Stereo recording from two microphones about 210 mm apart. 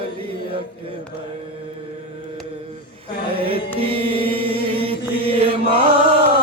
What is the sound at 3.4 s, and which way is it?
Music, 25° right (ahead or behind).